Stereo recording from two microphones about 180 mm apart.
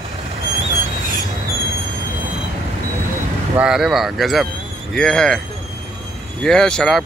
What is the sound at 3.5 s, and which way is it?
Speech, 5° right (ahead or behind).